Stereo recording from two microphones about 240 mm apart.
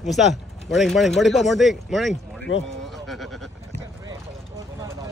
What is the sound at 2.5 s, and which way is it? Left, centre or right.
Speech, left.